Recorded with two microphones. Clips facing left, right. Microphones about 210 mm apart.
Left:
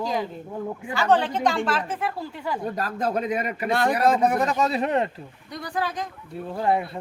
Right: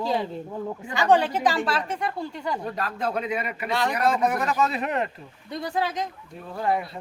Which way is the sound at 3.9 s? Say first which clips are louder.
Left 2 dB; 35° left (ahead or behind).